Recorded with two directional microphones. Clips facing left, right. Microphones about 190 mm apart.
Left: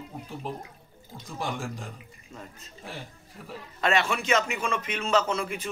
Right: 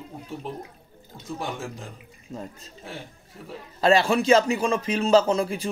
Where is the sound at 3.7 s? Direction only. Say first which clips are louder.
Right 7 dB; 35° right (ahead or behind).